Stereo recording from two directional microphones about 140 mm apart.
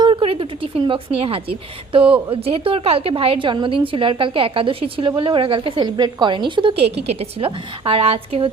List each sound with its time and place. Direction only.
0.0 s a woman's voice: 35° right (ahead or behind)